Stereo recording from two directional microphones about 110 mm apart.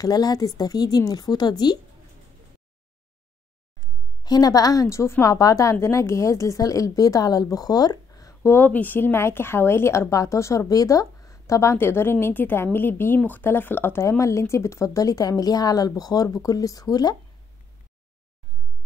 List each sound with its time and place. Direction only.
0.0 s a woman's voice: 35° left (ahead or behind)
3.8 s a woman's voice: 35° left (ahead or behind)
8.4 s a woman's voice: 15° left (ahead or behind); by 17.2 s 35° left (ahead or behind)